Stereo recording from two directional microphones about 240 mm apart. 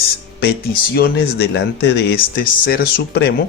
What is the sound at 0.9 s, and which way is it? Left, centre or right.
Speech, left.